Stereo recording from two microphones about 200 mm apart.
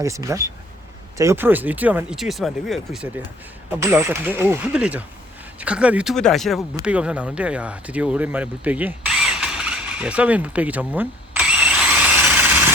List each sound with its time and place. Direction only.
0.0 s speech: 15° right (ahead or behind)
3.7 s speech: 10° right (ahead or behind)